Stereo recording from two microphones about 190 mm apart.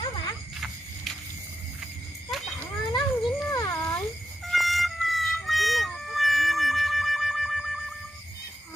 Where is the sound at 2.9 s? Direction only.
20° left (ahead or behind).